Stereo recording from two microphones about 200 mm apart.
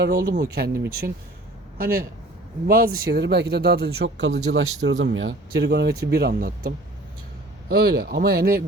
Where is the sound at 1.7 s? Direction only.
50° right (ahead or behind).